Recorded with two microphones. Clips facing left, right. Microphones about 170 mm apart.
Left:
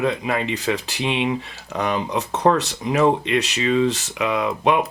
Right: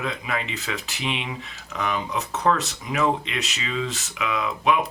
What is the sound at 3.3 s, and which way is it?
Speech, 50° left (ahead or behind).